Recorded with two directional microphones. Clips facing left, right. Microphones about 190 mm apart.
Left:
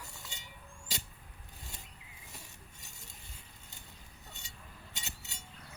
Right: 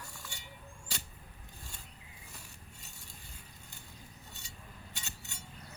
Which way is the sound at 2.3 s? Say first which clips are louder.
Left 2 dB; 20° left (ahead or behind).